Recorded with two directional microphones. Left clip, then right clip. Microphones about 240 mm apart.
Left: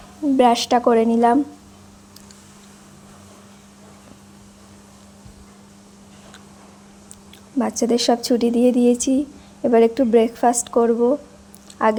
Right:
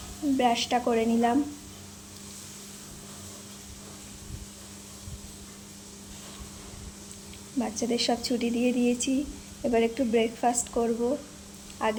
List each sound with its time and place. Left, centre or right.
0.3 s a woman's voice: left
7.6 s a woman's voice: left